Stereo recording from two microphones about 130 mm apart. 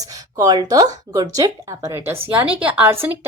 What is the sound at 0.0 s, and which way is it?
A woman's voice, 30° right (ahead or behind).